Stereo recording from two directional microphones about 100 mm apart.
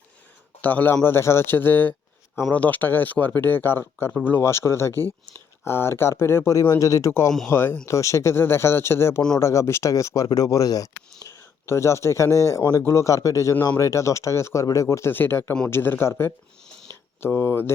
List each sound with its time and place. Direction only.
0.6 s a man's voice: 15° left (ahead or behind); by 10.8 s 35° left (ahead or behind)
11.2 s speech: 25° left (ahead or behind)